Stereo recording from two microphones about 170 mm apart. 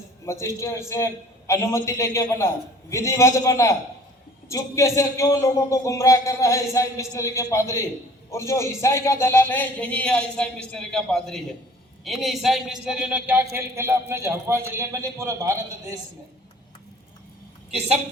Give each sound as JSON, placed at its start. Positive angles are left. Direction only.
{"t": 0.3, "sound": "a man's voice", "side_deg": 15}